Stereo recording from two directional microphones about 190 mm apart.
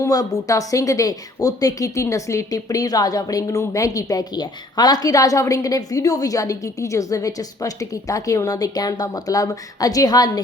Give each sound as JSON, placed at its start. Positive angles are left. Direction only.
{"t": 0.0, "sound": "speech", "side_deg": 20}